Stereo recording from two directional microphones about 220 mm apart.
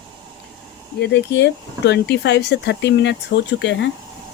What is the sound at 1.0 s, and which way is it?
Speech, 50° left (ahead or behind).